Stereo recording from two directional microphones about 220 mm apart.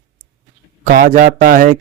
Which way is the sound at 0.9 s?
40° right (ahead or behind).